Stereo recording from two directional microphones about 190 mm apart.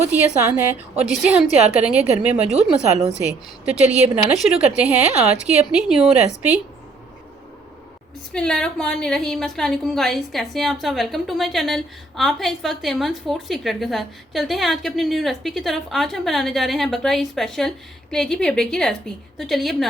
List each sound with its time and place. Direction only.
0.1 s a woman's voice: 5° right (ahead or behind)
2.3 s speech: 35° right (ahead or behind)
3.8 s a woman's voice: 5° right (ahead or behind)
8.3 s a woman's voice: 5° left (ahead or behind)